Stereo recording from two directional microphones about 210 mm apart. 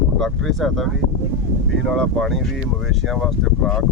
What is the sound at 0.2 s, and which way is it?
Speech, centre (ahead or behind).